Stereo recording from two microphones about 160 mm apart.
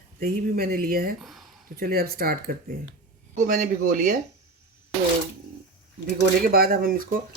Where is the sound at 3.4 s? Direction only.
55° right (ahead or behind).